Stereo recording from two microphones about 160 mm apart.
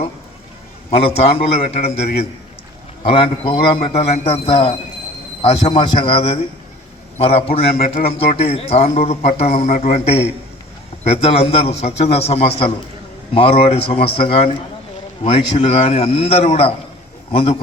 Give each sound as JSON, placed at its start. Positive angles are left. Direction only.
{"t": 0.9, "sound": "a man's voice", "side_deg": 40}